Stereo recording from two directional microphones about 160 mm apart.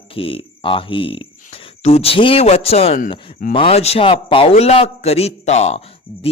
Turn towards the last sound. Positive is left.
turn(degrees=40)  # may be behind; listen again after turning